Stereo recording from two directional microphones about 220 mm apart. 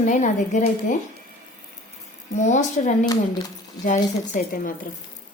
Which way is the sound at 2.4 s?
30° left (ahead or behind).